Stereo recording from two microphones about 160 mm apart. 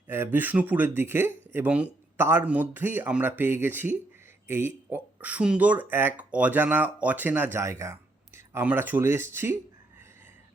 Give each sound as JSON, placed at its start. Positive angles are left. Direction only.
{"t": 0.1, "sound": "speech", "side_deg": -15}